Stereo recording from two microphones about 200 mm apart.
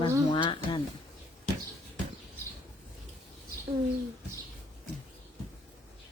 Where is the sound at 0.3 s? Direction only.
25° left (ahead or behind).